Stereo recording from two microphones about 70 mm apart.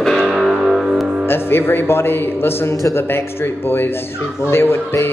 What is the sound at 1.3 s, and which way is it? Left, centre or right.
Speech, left.